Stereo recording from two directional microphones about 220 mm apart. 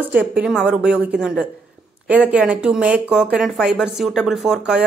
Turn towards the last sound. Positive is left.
turn(degrees=-5)  # may be behind; listen again after turning